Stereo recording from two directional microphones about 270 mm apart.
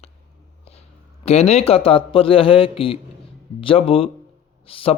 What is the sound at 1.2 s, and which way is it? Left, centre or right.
Speech, left.